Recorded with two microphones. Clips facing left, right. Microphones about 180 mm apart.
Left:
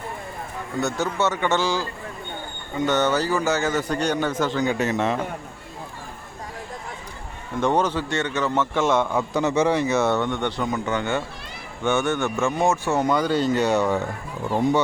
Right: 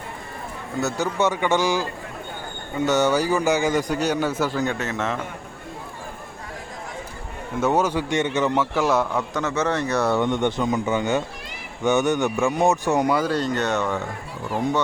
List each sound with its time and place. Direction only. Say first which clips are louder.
0.8 s speech: right 1 dB; 10° right (ahead or behind)
4.8 s speech: left 4 dB; 15° left (ahead or behind)
7.6 s speech: right 1 dB; 10° right (ahead or behind)
8.7 s a man's voice: even; 5° right (ahead or behind)
9.1 s speech: left 3 dB; 15° left (ahead or behind)
10.2 s speech: right 3 dB; 15° right (ahead or behind); by 13.9 s 10° left (ahead or behind)